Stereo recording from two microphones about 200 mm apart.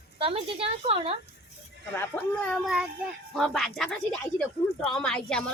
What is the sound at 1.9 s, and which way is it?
A woman's voice, 10° left (ahead or behind).